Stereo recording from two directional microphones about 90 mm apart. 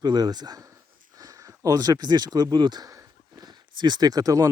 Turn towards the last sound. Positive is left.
turn(degrees=-40)  # may be behind; listen again after turning